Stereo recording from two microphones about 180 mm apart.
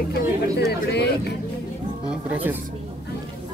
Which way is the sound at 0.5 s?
70° left (ahead or behind).